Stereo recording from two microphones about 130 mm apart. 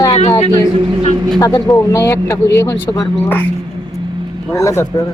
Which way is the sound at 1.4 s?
25° left (ahead or behind).